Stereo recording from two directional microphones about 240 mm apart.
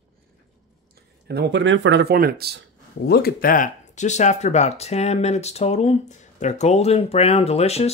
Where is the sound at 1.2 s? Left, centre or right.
Right.